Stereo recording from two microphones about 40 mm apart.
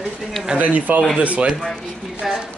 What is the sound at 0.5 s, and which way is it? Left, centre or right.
Speech, right.